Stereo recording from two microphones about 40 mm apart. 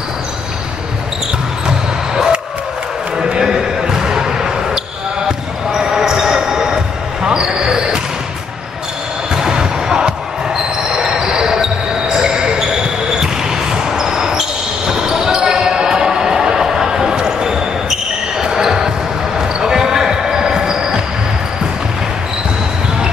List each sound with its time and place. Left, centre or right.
1.7 s basketball bounce: centre
3.3 s a sound: centre
5.7 s basketball bounce: centre
9.3 s basketball bounce: centre